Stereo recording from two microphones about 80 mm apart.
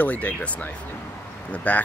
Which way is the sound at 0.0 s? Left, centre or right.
Centre.